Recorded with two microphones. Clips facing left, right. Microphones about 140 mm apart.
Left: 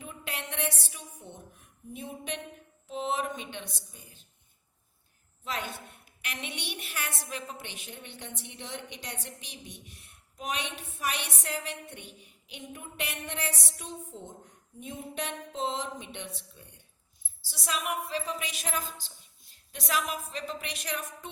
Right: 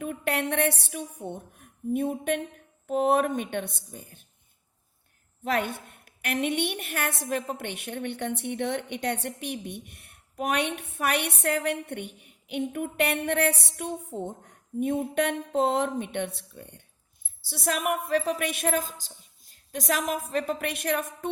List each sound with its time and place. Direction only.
0.0 s a woman's voice: 60° right (ahead or behind)
5.4 s a woman's voice: 60° right (ahead or behind)